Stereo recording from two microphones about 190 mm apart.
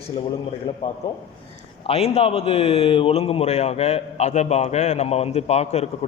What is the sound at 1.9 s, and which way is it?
Speech, 35° left (ahead or behind).